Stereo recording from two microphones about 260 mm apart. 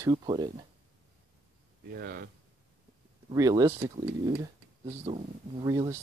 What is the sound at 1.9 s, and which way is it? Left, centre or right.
Speech, right.